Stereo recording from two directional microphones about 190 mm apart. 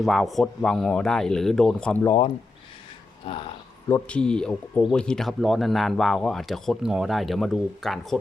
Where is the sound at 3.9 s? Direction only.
10° left (ahead or behind).